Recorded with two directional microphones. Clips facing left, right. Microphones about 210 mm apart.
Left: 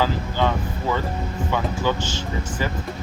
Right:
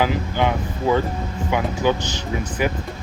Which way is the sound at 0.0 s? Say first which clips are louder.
Right 2 dB; 15° right (ahead or behind).